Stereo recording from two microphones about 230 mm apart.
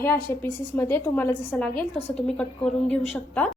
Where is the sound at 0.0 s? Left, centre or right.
Centre.